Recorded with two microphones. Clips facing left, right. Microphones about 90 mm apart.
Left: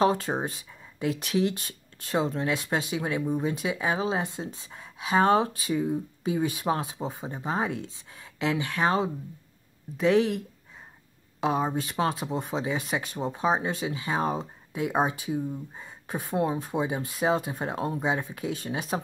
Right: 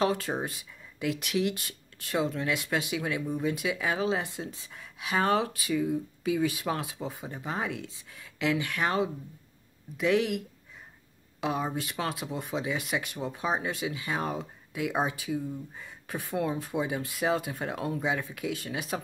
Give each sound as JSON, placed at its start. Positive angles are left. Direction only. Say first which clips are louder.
{"t": 0.0, "sound": "speech", "louder": "left 4 dB", "side_deg": 30}
{"t": 11.4, "sound": "speech", "louder": "left 4 dB", "side_deg": 30}